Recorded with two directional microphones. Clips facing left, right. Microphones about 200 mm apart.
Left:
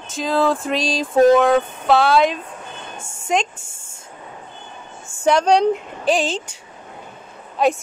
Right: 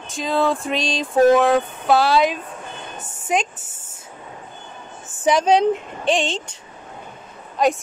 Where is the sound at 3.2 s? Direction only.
5° right (ahead or behind).